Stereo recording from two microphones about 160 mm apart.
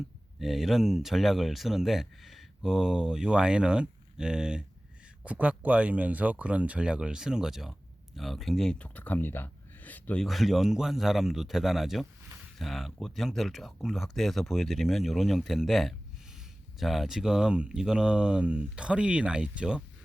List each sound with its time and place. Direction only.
0.3 s speech: centre (ahead or behind)
10.2 s speech: centre (ahead or behind)